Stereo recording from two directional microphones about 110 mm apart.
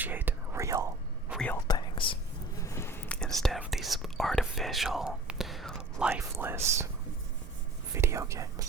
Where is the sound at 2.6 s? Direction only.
25° left (ahead or behind).